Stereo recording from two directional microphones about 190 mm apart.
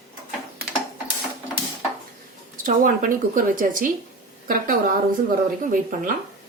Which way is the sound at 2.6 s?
45° right (ahead or behind).